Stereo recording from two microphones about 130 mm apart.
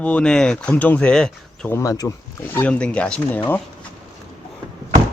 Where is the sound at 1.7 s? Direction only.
25° left (ahead or behind).